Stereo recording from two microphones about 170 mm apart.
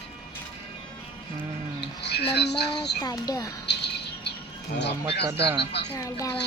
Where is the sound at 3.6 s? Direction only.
85° left.